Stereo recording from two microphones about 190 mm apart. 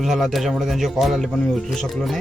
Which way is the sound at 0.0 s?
Centre (ahead or behind).